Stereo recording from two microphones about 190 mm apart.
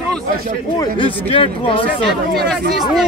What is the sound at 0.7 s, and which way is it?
Speech, 25° left (ahead or behind).